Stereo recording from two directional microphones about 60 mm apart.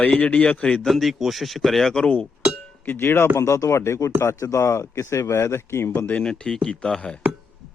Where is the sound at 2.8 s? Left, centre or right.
Left.